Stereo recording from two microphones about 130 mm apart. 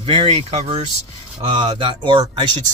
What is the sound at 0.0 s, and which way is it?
Speech, 45° right (ahead or behind).